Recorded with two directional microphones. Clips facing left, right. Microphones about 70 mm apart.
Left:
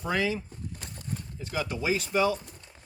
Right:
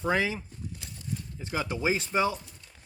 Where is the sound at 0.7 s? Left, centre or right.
Left.